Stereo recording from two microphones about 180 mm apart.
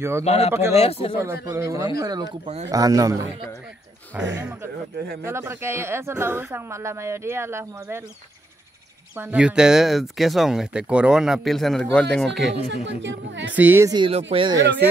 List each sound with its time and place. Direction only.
0.2 s speech: 35° left (ahead or behind)
0.5 s speech: 15° right (ahead or behind)
0.7 s speech: 35° left (ahead or behind)
1.2 s speech: 15° right (ahead or behind)
9.1 s speech: 10° right (ahead or behind)
12.6 s speech: 80° right
13.5 s speech: 10° right (ahead or behind)
13.9 s speech: 30° right (ahead or behind)